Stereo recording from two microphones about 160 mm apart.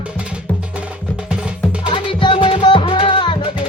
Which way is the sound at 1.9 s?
30° left (ahead or behind).